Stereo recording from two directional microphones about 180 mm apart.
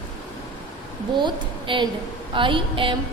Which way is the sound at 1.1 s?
25° right (ahead or behind).